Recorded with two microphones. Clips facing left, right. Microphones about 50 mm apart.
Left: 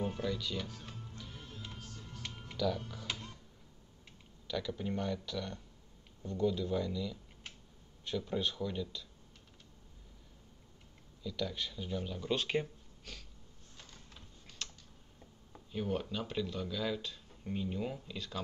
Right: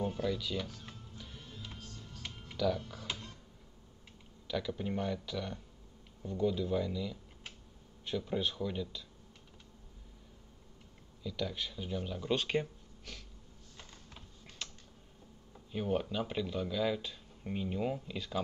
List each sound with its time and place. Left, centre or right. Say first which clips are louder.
0.2 s speech: right 2 dB; centre
1.1 s music: left 1 dB; centre
1.9 s music: left 1 dB; left
2.5 s speech: right 2 dB; centre
2.9 s music: even; centre
4.5 s speech: right 1 dB; centre
11.2 s speech: even; centre
14.6 s typing: even; centre
15.7 s speech: right 3 dB; centre